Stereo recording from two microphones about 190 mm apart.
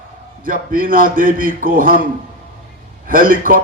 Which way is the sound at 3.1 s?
50° right (ahead or behind).